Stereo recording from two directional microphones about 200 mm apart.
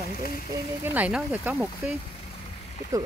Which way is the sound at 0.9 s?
5° right (ahead or behind).